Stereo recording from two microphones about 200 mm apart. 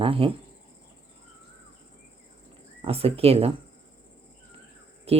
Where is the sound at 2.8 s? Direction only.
30° right (ahead or behind).